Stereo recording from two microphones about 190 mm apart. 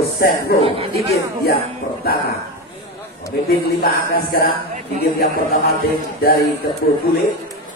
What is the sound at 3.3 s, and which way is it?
A man's voice, 55° left (ahead or behind).